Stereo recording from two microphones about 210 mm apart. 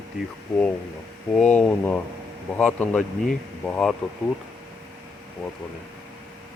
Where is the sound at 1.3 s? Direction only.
5° left (ahead or behind).